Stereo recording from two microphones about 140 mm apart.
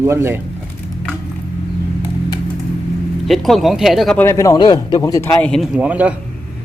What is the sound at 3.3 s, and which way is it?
Speech, centre (ahead or behind).